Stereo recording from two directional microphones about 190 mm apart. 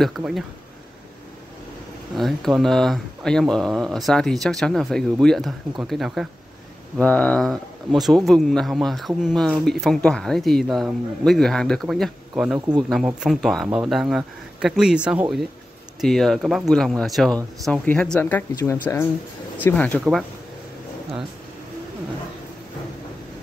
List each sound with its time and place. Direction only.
0.0 s speech: centre (ahead or behind)
2.1 s speech: centre (ahead or behind)
12.5 s speech: 20° right (ahead or behind)
12.9 s speech: 5° right (ahead or behind)